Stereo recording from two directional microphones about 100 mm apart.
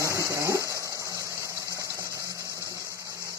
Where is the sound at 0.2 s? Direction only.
30° right (ahead or behind).